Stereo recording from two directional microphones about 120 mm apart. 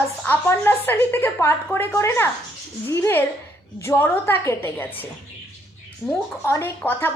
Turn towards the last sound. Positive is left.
turn(degrees=20)  # may be behind; listen again after turning